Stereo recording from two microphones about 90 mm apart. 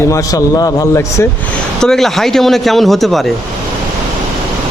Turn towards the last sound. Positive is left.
turn(degrees=0)  # may be behind; listen again after turning